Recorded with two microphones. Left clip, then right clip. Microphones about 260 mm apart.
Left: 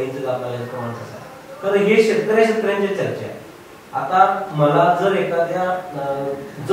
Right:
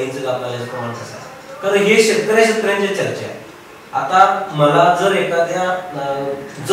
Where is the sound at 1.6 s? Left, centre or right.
Centre.